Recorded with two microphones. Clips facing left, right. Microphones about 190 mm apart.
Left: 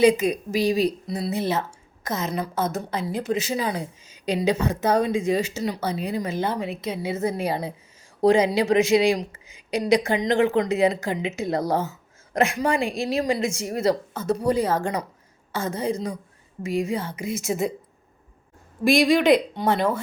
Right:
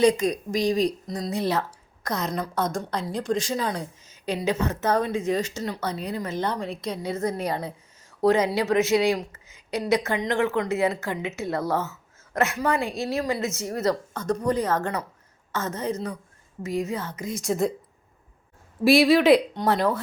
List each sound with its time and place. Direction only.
0.0 s a woman's voice: 10° left (ahead or behind)
18.9 s speech: 5° right (ahead or behind)